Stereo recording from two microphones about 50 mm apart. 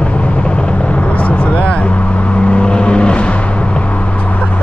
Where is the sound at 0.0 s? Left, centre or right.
Left.